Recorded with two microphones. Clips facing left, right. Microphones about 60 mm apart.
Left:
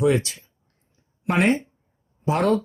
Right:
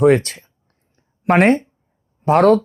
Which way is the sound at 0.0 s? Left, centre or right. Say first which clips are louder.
Right 7 dB; right.